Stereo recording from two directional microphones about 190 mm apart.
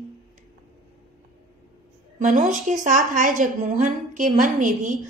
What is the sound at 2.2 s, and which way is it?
A woman's voice, 45° right (ahead or behind).